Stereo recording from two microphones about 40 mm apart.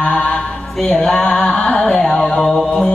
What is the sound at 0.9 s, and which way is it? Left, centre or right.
Music, centre.